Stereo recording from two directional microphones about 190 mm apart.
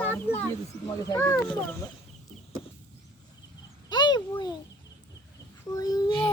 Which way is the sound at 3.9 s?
25° left (ahead or behind).